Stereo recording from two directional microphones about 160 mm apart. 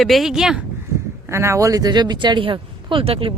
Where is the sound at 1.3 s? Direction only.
15° right (ahead or behind); by 3.3 s 35° right (ahead or behind).